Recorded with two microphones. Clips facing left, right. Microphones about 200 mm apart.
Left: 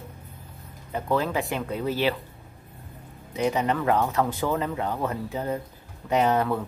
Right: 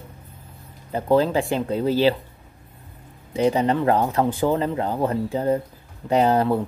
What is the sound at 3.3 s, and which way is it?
Speech, 30° right (ahead or behind).